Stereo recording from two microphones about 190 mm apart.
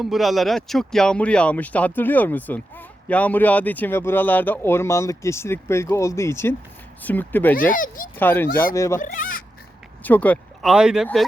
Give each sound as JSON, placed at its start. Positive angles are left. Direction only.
{"t": 0.0, "sound": "speech", "side_deg": 0}
{"t": 7.7, "sound": "speech", "side_deg": 45}
{"t": 8.1, "sound": "speech", "side_deg": 10}
{"t": 9.0, "sound": "speech", "side_deg": 45}
{"t": 10.0, "sound": "speech", "side_deg": 10}